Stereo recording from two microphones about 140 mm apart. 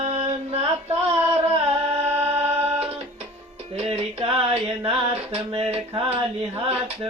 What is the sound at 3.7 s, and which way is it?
Music, 45° right (ahead or behind).